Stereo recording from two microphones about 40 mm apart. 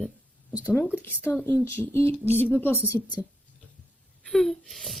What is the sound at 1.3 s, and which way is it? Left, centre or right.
Speech, left.